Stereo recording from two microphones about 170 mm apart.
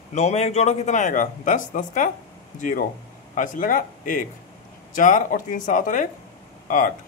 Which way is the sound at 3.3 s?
50° left (ahead or behind).